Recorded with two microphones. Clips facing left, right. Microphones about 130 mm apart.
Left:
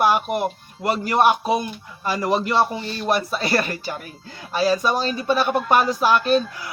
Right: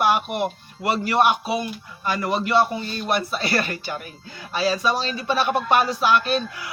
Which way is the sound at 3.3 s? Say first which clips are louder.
Left 2 dB; 35° left (ahead or behind).